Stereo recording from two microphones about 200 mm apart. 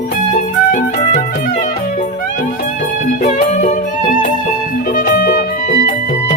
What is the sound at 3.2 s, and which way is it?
Music, 35° left (ahead or behind).